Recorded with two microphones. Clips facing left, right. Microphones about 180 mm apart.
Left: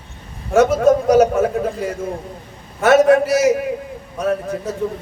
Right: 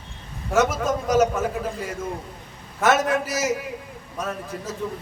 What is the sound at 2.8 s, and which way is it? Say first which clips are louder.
Speech: left 9 dB; 60° left (ahead or behind).